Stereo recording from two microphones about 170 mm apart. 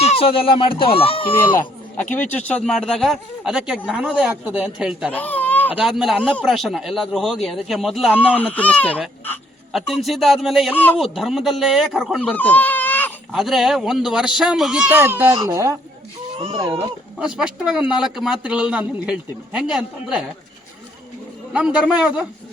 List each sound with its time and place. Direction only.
0.0 s speech: 35° left (ahead or behind)
1.5 s speech: 10° left (ahead or behind); by 5.1 s 5° right (ahead or behind)
5.1 s a sound: 10° left (ahead or behind)
5.7 s speech: 5° right (ahead or behind)
8.3 s speech: 10° left (ahead or behind)
12.2 s baby cry: 10° left (ahead or behind)
13.3 s speech: centre (ahead or behind); by 15.7 s 20° right (ahead or behind)
16.7 s a man's voice: 5° right (ahead or behind)
21.5 s speech: 5° right (ahead or behind)